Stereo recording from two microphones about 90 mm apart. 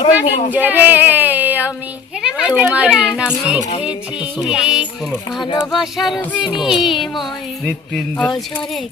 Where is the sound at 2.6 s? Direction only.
15° right (ahead or behind).